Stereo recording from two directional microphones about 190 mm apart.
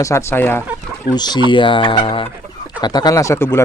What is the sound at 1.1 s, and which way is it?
Speech, 20° left (ahead or behind).